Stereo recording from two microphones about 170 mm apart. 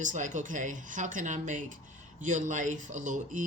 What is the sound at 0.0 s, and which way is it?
Speech, 50° right (ahead or behind).